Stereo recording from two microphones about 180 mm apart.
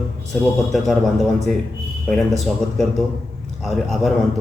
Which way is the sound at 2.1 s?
Centre (ahead or behind).